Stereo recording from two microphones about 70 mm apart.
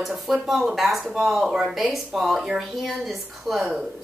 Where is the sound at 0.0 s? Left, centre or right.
Centre.